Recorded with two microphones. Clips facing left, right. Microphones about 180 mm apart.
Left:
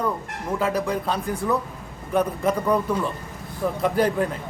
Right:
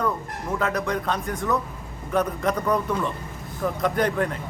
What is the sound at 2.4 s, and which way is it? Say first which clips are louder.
Speech: left 2 dB; 10° left (ahead or behind).